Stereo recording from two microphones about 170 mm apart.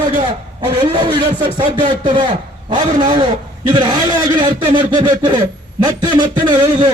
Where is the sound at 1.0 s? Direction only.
25° right (ahead or behind).